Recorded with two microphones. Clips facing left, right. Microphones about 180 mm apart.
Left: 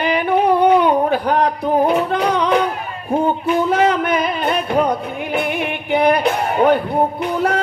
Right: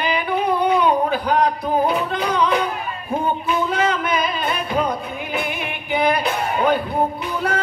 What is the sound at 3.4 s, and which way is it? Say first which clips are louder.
Music: left 5 dB; 60° left (ahead or behind).